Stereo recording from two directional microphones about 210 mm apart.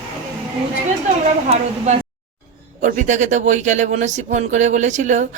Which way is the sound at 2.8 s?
35° right (ahead or behind).